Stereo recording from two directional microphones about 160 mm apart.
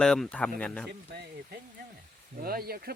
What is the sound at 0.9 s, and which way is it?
Speech, 85° right.